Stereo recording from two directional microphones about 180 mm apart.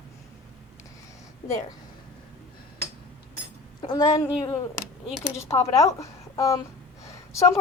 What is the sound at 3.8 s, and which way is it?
A woman's voice, 20° left (ahead or behind).